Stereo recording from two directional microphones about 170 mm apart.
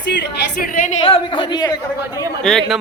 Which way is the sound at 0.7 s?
50° left (ahead or behind).